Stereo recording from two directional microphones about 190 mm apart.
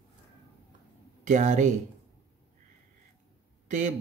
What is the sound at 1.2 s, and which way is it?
Speech, 40° right (ahead or behind).